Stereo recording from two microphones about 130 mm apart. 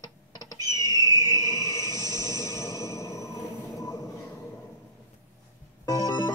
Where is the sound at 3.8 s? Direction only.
25° left (ahead or behind).